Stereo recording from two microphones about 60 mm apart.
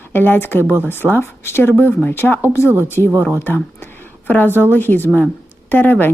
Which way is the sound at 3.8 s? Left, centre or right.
Left.